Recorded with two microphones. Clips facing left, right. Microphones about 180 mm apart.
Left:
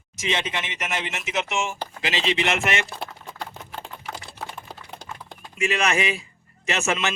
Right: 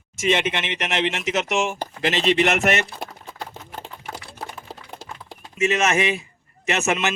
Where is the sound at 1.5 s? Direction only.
60° right (ahead or behind); by 3.1 s 45° right (ahead or behind).